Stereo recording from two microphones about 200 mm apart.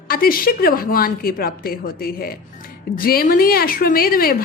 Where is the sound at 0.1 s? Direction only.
45° left (ahead or behind).